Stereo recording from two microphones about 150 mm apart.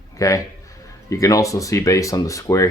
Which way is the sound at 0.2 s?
20° left (ahead or behind).